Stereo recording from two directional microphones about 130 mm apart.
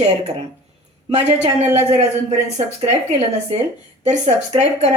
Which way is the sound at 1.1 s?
55° right (ahead or behind).